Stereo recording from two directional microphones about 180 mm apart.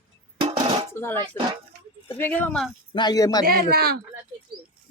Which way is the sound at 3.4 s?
55° right (ahead or behind).